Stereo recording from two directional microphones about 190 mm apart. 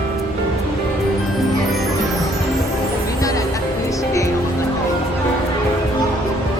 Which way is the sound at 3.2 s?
15° left (ahead or behind).